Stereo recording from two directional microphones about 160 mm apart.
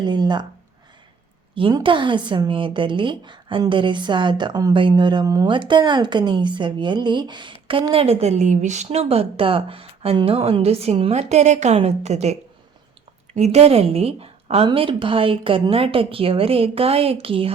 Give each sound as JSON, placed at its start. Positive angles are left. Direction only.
{"t": 0.0, "sound": "speech", "side_deg": -25}
{"t": 1.5, "sound": "a woman's voice", "side_deg": -30}